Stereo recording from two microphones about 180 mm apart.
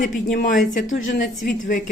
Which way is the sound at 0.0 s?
45° left (ahead or behind).